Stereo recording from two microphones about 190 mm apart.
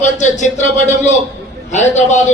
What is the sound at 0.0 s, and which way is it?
A man's voice, 40° left (ahead or behind).